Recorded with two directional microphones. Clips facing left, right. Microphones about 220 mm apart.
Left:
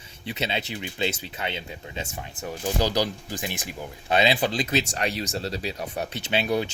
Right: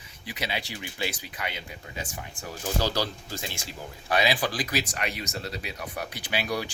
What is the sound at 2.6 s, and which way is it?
Speech, 15° left (ahead or behind).